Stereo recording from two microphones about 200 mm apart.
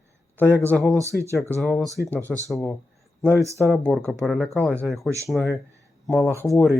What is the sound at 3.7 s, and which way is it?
Speech, 5° left (ahead or behind).